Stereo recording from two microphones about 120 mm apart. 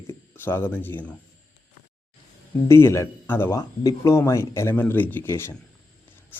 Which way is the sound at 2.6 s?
20° left (ahead or behind).